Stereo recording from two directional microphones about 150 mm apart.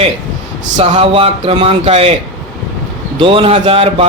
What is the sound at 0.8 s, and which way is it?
Speech, 40° right (ahead or behind).